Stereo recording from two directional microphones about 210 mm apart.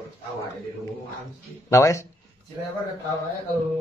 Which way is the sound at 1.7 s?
15° left (ahead or behind).